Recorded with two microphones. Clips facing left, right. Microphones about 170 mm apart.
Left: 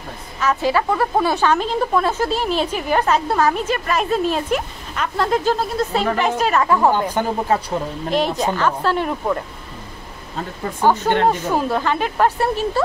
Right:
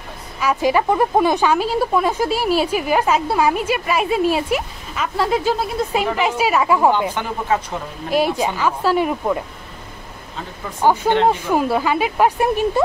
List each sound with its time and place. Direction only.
0.4 s a woman's voice: 10° right (ahead or behind)
7.2 s speech: 40° left (ahead or behind)
8.1 s a woman's voice: 10° right (ahead or behind)
10.8 s a woman's voice: 15° right (ahead or behind)